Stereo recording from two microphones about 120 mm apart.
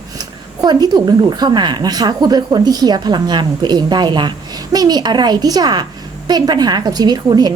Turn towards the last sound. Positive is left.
turn(degrees=-35)  # may be behind; listen again after turning